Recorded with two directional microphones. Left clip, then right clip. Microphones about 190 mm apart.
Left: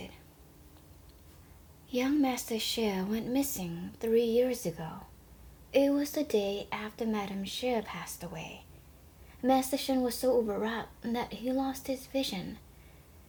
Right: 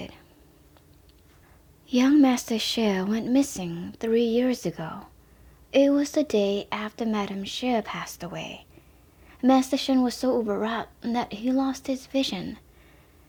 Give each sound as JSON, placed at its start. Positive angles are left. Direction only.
{"t": 1.9, "sound": "speech", "side_deg": -45}